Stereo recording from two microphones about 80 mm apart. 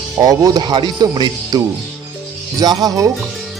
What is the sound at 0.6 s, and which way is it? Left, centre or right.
Speech, right.